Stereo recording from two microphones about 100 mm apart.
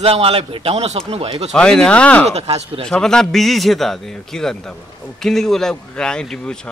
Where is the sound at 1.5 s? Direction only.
10° left (ahead or behind).